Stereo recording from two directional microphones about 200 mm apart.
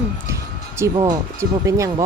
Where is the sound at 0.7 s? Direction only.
15° right (ahead or behind).